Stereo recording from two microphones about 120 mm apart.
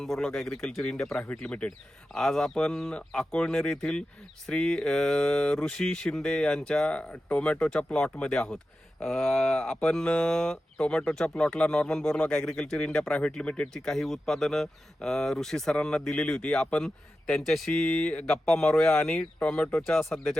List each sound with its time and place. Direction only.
0.0 s speech: 5° left (ahead or behind)